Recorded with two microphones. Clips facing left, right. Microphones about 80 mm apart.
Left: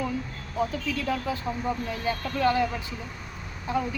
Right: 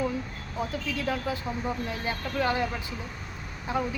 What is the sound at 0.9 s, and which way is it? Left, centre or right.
Speech, right.